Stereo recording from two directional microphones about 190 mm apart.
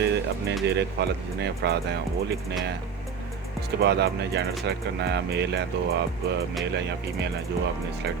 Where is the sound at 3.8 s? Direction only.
60° right (ahead or behind).